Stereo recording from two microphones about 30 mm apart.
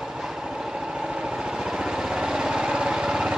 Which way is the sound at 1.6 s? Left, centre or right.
Right.